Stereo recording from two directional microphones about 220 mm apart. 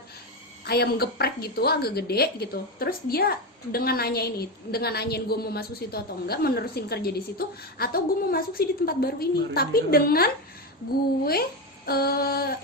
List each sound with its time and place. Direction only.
0.7 s a woman's voice: 45° left (ahead or behind)
11.9 s a woman's voice: 45° left (ahead or behind)